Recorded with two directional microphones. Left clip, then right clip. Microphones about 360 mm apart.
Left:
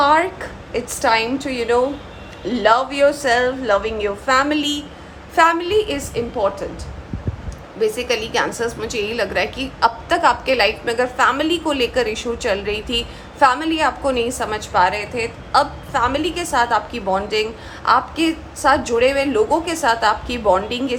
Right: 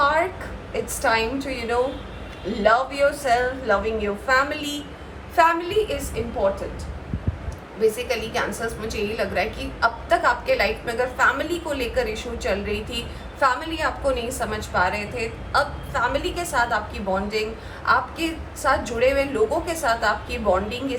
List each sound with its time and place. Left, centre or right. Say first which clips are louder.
0.0 s a sound: left 5 dB; left
0.7 s a woman's voice: left 4 dB; left
7.8 s a woman's voice: left 3 dB; left